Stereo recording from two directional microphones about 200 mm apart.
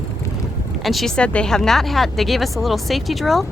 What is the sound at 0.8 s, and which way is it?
A woman's voice, centre (ahead or behind).